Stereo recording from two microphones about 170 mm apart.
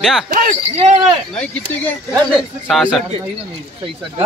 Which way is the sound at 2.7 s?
Centre (ahead or behind).